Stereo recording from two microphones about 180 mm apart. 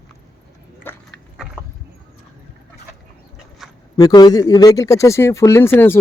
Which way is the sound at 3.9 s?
20° left (ahead or behind).